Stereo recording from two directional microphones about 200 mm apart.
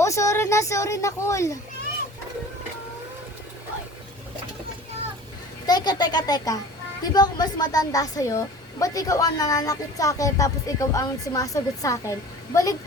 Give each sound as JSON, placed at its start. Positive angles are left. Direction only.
{"t": 0.0, "sound": "speech", "side_deg": 15}
{"t": 5.6, "sound": "speech", "side_deg": 20}